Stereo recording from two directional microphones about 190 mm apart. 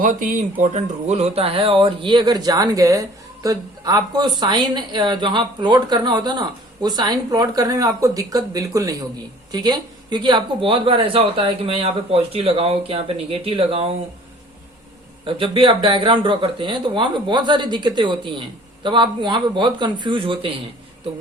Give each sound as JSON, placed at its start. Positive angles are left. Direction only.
{"t": 0.0, "sound": "speech", "side_deg": -45}
{"t": 15.3, "sound": "speech", "side_deg": -25}